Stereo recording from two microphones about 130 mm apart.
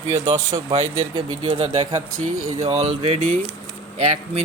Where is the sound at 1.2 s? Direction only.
35° right (ahead or behind).